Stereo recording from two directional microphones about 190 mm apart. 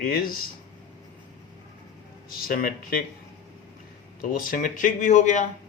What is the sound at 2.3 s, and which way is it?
Speech, 50° left (ahead or behind).